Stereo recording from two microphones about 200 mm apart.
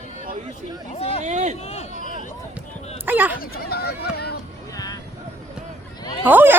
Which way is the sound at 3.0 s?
10° right (ahead or behind).